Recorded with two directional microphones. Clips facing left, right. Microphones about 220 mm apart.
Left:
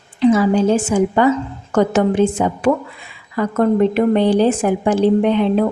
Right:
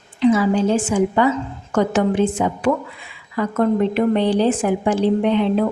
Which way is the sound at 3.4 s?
45° left (ahead or behind).